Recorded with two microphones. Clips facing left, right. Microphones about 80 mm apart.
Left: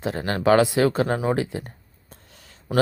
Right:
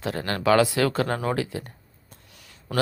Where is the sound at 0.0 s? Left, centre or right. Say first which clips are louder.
Left 3 dB; left.